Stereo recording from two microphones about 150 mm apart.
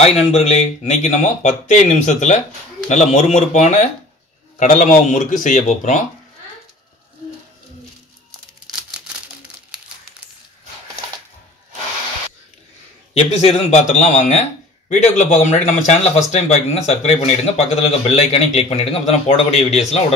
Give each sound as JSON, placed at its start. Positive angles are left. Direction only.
{"t": 0.0, "sound": "a man's voice", "side_deg": 45}
{"t": 9.7, "sound": "crumpling", "side_deg": -5}
{"t": 13.1, "sound": "a man's voice", "side_deg": 45}